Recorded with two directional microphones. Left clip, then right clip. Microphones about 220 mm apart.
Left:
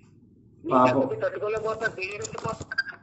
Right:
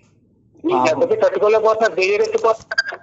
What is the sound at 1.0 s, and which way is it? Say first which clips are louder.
Speech: right 11 dB; 50° right (ahead or behind).